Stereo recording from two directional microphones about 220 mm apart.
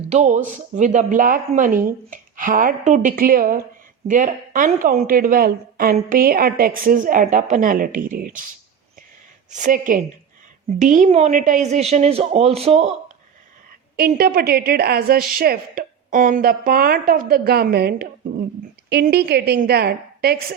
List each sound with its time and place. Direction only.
0.1 s a woman's voice: 30° right (ahead or behind)
9.5 s a woman's voice: 35° right (ahead or behind)
13.9 s a woman's voice: 45° right (ahead or behind)